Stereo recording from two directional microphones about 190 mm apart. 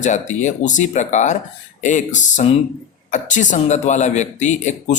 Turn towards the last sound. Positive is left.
turn(degrees=40)  # may be behind; listen again after turning